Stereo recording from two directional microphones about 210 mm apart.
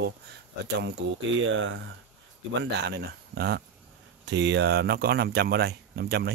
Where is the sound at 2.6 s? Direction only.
50° right (ahead or behind).